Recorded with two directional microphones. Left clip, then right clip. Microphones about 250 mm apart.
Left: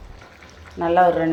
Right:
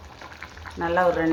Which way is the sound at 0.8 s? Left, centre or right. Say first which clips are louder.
Left 5 dB; centre.